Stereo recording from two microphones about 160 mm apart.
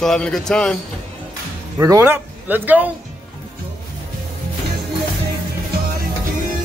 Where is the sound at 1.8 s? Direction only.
15° right (ahead or behind).